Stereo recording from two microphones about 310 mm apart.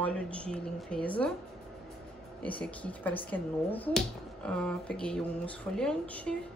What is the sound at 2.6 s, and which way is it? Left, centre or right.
Speech, centre.